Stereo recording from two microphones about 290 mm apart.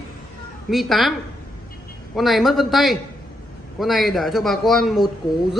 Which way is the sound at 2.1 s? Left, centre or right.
Centre.